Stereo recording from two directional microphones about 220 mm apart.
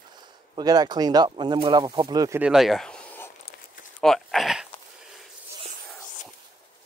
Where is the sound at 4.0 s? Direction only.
Centre (ahead or behind).